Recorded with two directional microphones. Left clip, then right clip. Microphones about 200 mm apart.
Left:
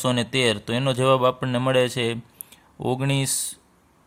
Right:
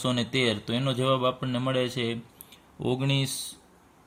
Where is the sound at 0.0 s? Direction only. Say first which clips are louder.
Left 5 dB; 40° left (ahead or behind).